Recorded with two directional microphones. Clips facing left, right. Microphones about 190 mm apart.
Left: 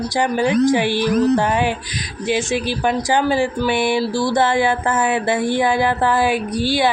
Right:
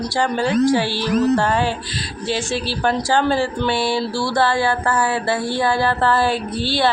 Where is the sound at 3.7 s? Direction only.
20° left (ahead or behind).